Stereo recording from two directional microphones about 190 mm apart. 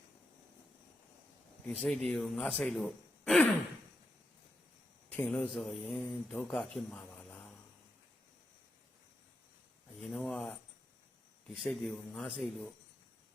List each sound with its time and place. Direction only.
1.6 s speech: 5° left (ahead or behind)
5.1 s speech: 10° left (ahead or behind)
10.0 s speech: 5° left (ahead or behind)